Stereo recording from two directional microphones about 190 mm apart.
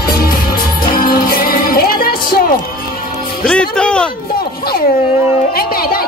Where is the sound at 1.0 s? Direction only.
50° left (ahead or behind).